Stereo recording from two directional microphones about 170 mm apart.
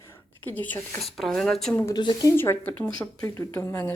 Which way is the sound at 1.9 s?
25° left (ahead or behind).